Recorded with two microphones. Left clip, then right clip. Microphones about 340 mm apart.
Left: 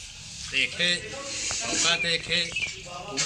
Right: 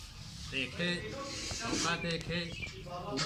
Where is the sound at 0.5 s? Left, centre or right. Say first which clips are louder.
Left 11 dB; centre.